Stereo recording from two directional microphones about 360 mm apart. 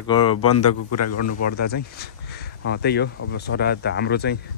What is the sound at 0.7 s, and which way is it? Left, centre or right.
Speech, left.